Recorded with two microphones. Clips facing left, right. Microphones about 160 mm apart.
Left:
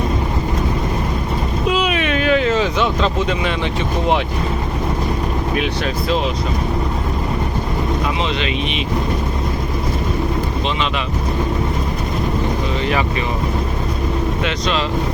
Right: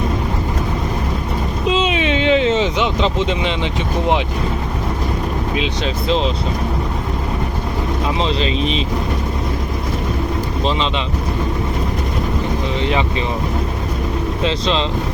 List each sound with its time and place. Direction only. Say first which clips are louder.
1.7 s a sound: right 2 dB; 25° right (ahead or behind)
5.5 s speech: left 1 dB; 25° right (ahead or behind)
8.2 s speech: right 2 dB; 35° right (ahead or behind)
14.4 s speech: right 5 dB; 25° right (ahead or behind)